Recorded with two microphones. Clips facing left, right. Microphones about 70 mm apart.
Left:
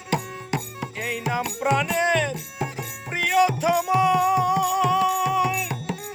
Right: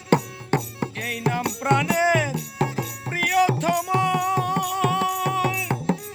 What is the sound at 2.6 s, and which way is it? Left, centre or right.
Music, right.